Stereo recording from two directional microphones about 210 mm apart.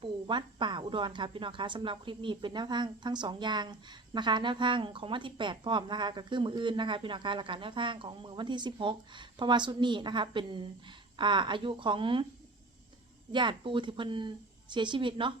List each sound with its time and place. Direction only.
0.0 s speech: 25° right (ahead or behind)
13.3 s speech: 25° right (ahead or behind)